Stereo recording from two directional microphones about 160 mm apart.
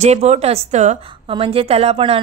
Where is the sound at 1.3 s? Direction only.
35° right (ahead or behind).